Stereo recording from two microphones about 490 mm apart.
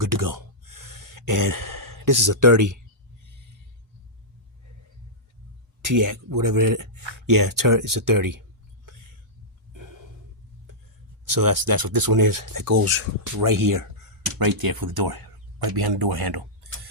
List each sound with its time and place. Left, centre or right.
0.0 s gasp: right
5.8 s speech: right
9.7 s a sound: right
11.3 s speech: right
13.4 s speech: right